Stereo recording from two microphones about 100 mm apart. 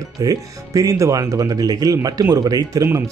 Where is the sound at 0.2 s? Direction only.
35° right (ahead or behind).